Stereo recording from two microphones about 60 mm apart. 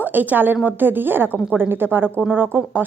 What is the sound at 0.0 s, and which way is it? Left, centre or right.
Speech, right.